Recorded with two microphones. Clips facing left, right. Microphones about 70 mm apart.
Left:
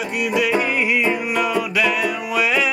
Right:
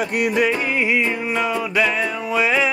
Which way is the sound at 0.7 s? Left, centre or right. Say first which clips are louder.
Left 1 dB; centre.